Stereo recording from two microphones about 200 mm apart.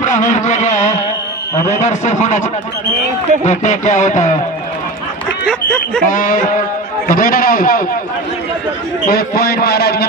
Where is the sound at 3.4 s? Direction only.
35° left (ahead or behind).